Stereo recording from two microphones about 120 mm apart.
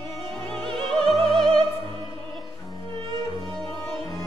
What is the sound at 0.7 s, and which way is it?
Music, 5° left (ahead or behind).